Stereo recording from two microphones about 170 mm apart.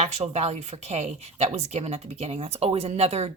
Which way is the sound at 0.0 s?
40° right (ahead or behind).